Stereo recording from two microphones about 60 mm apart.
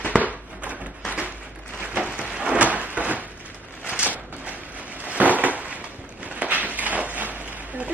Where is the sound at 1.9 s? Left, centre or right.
Right.